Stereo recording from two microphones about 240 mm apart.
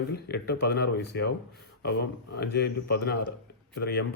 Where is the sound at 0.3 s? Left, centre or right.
Left.